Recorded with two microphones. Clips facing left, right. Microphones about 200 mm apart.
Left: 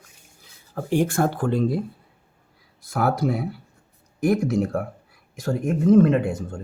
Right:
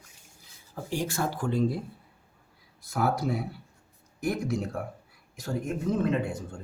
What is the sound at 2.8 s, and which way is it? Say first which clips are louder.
Speech: left 5 dB; 85° left.